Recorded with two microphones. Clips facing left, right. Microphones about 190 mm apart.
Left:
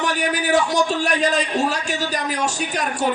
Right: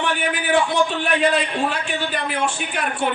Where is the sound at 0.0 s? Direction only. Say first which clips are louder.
Left 1 dB; 40° left (ahead or behind).